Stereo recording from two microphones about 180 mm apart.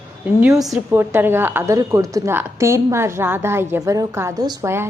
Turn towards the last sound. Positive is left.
turn(degrees=-15)  # may be behind; listen again after turning